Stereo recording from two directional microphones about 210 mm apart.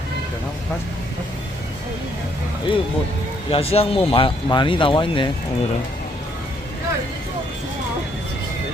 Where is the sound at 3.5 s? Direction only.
25° left (ahead or behind).